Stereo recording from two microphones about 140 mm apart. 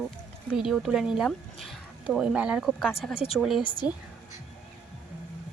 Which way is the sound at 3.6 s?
30° left (ahead or behind).